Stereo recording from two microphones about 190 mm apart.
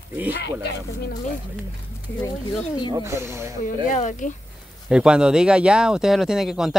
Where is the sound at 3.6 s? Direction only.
40° left (ahead or behind).